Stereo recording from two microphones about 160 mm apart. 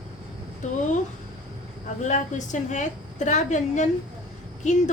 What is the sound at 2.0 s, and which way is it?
A woman's voice, 50° left (ahead or behind).